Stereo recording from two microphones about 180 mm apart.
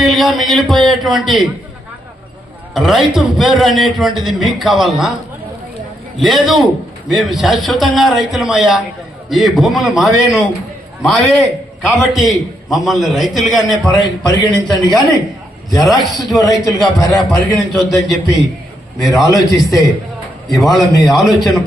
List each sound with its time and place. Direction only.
0.0 s a man's voice: centre (ahead or behind)
2.7 s a man's voice: centre (ahead or behind)
6.1 s a man's voice: centre (ahead or behind)
11.8 s a man's voice: centre (ahead or behind)
13.9 s a man's voice: 25° left (ahead or behind)
14.8 s a man's voice: centre (ahead or behind)